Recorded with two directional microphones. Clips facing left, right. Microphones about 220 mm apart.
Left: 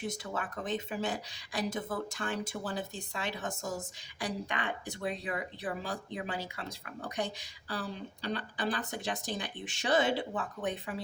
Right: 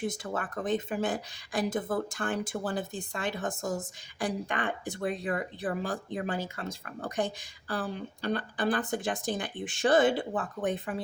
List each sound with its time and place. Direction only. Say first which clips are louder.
0.1 s a woman's voice: right 3 dB; 50° right (ahead or behind)